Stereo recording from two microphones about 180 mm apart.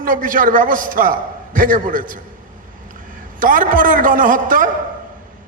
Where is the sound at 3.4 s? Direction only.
50° right (ahead or behind).